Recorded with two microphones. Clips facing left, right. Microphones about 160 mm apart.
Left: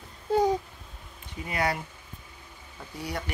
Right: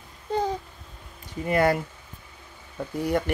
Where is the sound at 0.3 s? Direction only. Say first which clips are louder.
Left 3 dB; 10° left (ahead or behind).